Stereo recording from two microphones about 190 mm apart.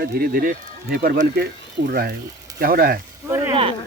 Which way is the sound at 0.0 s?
55° right (ahead or behind).